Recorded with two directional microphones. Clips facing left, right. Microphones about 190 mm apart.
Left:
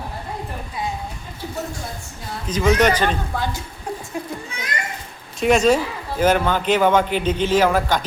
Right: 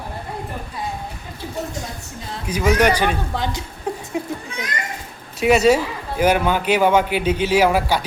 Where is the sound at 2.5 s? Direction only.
10° right (ahead or behind).